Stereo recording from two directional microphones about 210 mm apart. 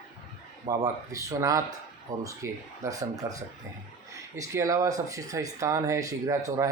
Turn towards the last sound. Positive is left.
turn(degrees=-15)  # may be behind; listen again after turning